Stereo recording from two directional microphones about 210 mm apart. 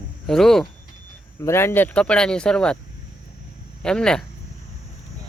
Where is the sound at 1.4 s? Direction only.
10° left (ahead or behind).